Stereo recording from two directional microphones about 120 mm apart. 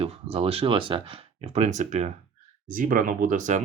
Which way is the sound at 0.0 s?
55° right (ahead or behind).